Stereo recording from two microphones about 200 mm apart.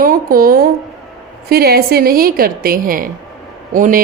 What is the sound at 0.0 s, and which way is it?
A woman's voice, 45° right (ahead or behind).